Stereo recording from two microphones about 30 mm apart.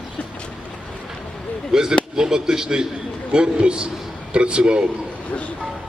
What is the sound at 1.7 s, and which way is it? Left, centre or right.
Speech, right.